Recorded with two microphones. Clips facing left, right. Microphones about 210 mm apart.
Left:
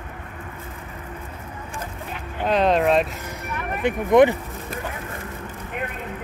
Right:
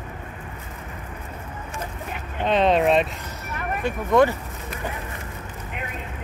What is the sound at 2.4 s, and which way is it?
Vehicle, centre (ahead or behind).